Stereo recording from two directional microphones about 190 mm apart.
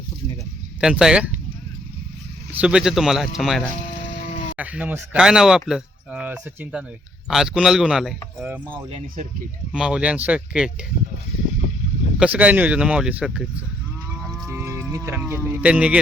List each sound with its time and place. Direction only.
0.8 s speech: 5° right (ahead or behind)
2.5 s speech: 5° right (ahead or behind)
8.7 s speech: 30° right (ahead or behind)
9.7 s speech: 5° right (ahead or behind)
12.2 s speech: 5° right (ahead or behind)
14.4 s speech: 15° right (ahead or behind)